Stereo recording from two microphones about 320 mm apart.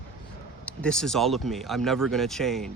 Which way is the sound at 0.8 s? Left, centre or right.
Centre.